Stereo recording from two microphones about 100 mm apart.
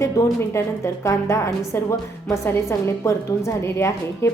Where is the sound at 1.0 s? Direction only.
30° left (ahead or behind).